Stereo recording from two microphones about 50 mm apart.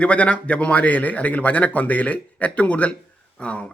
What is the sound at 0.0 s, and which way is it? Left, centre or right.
Speech, left.